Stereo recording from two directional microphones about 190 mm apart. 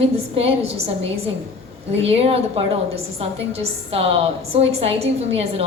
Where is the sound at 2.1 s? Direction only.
30° right (ahead or behind).